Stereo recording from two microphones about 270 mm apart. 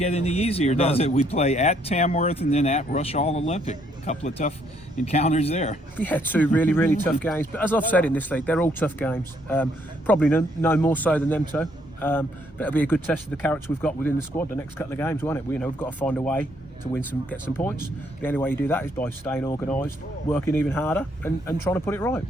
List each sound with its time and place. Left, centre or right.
0.0 s speech: left
6.0 s speech: centre